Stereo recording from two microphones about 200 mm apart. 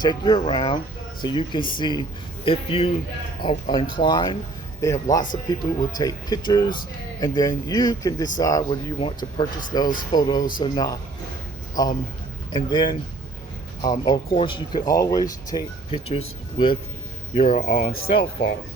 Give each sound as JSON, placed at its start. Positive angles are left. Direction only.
{"t": 0.0, "sound": "speech", "side_deg": 20}
{"t": 14.0, "sound": "speech", "side_deg": 25}